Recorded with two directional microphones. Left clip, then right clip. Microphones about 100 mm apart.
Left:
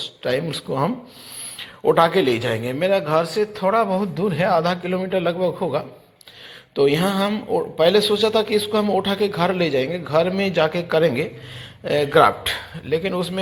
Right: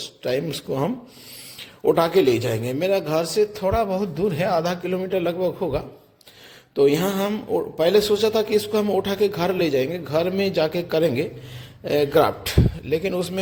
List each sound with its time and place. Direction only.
0.0 s a man's voice: 35° right (ahead or behind)